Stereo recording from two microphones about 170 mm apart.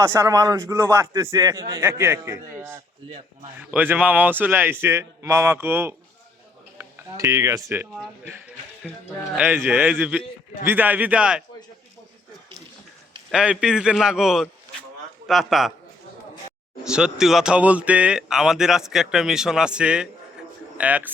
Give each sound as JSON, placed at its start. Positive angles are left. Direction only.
{"t": 0.0, "sound": "a man's voice", "side_deg": -15}
{"t": 13.3, "sound": "speech", "side_deg": -5}
{"t": 16.8, "sound": "a man's voice", "side_deg": -5}